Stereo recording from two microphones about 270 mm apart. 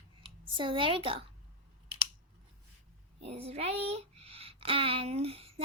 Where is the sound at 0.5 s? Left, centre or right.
Centre.